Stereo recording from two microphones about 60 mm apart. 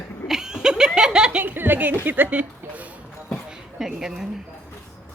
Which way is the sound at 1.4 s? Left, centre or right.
Right.